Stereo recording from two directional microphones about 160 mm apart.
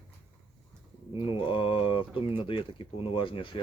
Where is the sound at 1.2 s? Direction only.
35° left (ahead or behind).